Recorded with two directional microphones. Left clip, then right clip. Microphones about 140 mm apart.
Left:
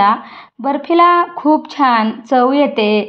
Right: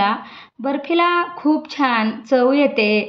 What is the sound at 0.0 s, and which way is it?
Speech, 35° left (ahead or behind).